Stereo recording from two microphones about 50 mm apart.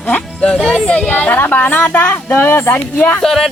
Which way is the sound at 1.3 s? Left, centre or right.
Left.